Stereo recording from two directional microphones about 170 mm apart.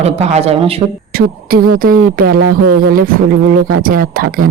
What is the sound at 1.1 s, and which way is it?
Speech, 55° right (ahead or behind).